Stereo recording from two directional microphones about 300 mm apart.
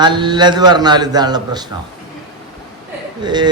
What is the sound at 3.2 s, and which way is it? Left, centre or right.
Speech, centre.